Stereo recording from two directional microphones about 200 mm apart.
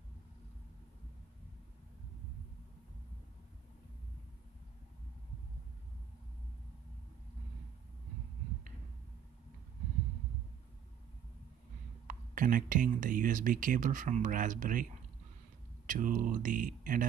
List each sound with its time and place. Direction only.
12.1 s speech: 45° right (ahead or behind)
15.9 s speech: 40° right (ahead or behind)